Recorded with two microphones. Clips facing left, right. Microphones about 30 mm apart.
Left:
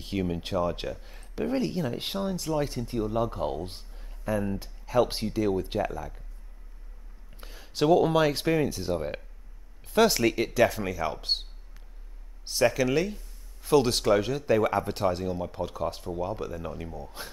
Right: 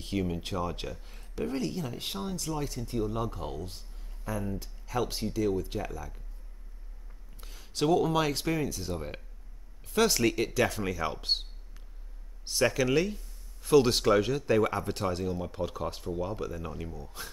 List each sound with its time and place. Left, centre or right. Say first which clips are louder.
0.0 s speech: left 2 dB; centre
2.1 s speech: left 6 dB; centre
3.6 s a sound: left 3 dB; left
4.6 s speech: left 7 dB; left
7.4 s a sound: left 4 dB; centre
8.2 s speech: left 5 dB; centre
12.4 s speech: left 2 dB; centre
17.2 s speech: left 2 dB; left